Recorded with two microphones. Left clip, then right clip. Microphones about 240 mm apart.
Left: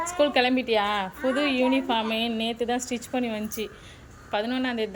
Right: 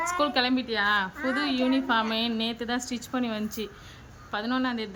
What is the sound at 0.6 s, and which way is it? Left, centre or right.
Speech, right.